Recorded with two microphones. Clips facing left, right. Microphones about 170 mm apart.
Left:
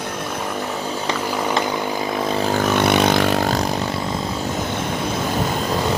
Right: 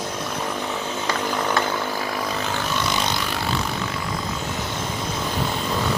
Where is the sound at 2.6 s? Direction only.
60° left (ahead or behind); by 3.7 s 40° left (ahead or behind).